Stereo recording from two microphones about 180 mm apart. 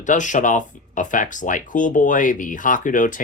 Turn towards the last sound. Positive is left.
turn(degrees=45)  # may be behind; listen again after turning